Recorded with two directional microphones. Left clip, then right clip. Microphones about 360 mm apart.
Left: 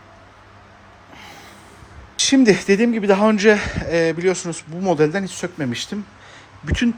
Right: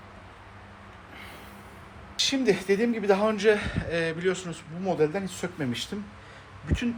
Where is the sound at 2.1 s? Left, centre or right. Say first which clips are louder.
Left 9 dB; left.